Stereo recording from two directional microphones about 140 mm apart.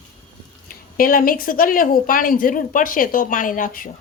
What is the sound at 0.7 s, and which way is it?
Speech, 90° left.